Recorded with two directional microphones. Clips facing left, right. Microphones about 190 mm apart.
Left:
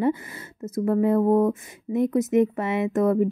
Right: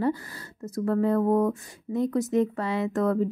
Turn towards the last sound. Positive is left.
turn(degrees=20)  # may be behind; listen again after turning